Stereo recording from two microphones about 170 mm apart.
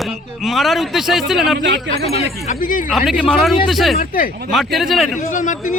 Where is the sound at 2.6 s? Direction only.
55° left (ahead or behind).